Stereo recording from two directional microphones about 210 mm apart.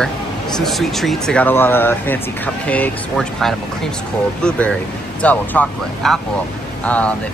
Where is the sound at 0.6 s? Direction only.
Centre (ahead or behind).